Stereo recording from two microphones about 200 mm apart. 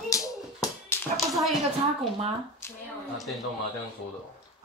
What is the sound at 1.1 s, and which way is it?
Speech, centre (ahead or behind).